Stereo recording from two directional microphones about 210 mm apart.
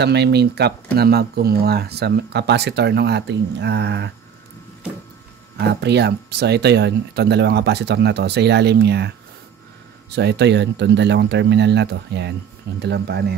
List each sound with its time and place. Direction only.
0.0 s speech: 55° right (ahead or behind)
5.7 s speech: 50° right (ahead or behind)
10.1 s speech: 55° right (ahead or behind)